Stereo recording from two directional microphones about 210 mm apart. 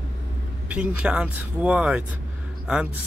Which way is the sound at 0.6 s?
5° right (ahead or behind).